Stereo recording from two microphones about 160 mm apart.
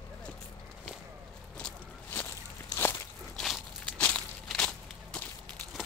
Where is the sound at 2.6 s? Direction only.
15° left (ahead or behind).